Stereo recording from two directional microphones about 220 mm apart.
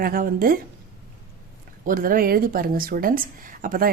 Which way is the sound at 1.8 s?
40° right (ahead or behind).